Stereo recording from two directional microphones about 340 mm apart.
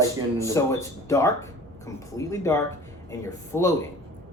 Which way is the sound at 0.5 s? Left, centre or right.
Centre.